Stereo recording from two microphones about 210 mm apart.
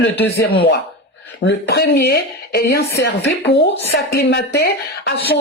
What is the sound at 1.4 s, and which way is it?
Speech, 55° left (ahead or behind).